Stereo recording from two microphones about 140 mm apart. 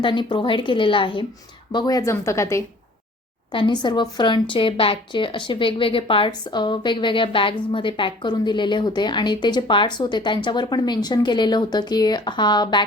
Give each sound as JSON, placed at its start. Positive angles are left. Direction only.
{"t": 0.0, "sound": "a woman's voice", "side_deg": 35}
{"t": 3.5, "sound": "a woman's voice", "side_deg": 35}